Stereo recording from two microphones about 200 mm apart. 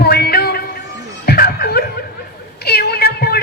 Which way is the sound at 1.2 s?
50° left (ahead or behind).